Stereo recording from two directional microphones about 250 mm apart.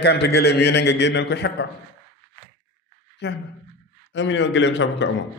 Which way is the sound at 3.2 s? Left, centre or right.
Left.